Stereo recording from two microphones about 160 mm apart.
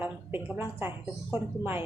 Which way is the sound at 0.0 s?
10° right (ahead or behind).